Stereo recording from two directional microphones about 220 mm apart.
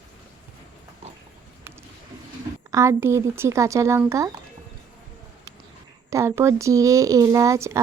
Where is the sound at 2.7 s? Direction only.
15° right (ahead or behind).